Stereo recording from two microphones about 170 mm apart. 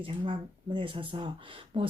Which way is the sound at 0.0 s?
30° right (ahead or behind).